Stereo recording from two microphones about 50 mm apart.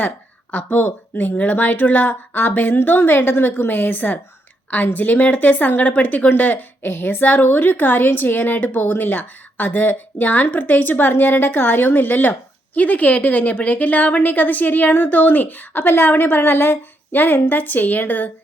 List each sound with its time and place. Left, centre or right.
0.5 s a woman's voice: left